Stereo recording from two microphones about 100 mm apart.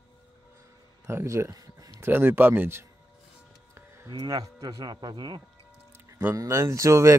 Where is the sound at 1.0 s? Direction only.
25° right (ahead or behind).